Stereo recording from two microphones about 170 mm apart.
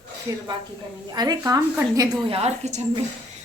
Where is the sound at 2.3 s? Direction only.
35° right (ahead or behind).